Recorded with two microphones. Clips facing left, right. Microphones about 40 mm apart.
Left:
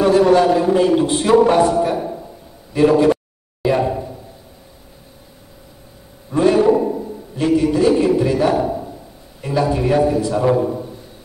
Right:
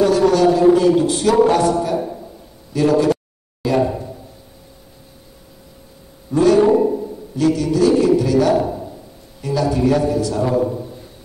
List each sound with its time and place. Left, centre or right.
0.0 s a man's voice: left
6.3 s a man's voice: left